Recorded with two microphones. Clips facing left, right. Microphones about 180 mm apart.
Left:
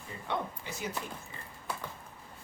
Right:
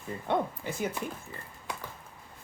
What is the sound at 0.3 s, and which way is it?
Speech, 50° right (ahead or behind).